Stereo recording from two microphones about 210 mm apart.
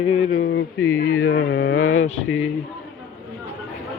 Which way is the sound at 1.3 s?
55° left (ahead or behind).